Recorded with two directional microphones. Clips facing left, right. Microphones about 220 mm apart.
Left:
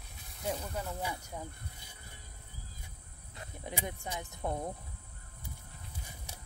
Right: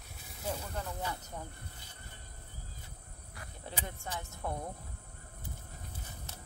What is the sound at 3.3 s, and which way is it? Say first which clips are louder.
Speech: left 3 dB; 15° left (ahead or behind).